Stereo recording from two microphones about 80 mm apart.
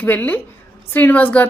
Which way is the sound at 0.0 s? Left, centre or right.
Left.